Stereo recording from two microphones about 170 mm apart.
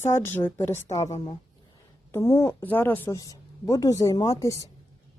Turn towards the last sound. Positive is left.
turn(degrees=20)  # may be behind; listen again after turning